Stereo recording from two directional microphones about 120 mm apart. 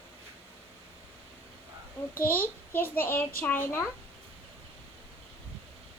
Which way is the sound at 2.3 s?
15° left (ahead or behind).